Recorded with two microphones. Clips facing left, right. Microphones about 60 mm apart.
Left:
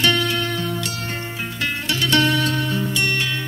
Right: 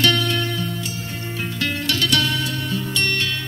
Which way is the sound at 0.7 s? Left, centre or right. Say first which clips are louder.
Left 3 dB; left.